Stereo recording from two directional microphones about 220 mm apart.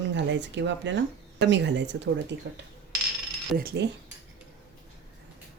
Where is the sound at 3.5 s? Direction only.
45° right (ahead or behind).